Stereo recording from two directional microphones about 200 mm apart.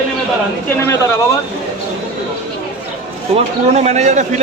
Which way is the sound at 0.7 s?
10° left (ahead or behind).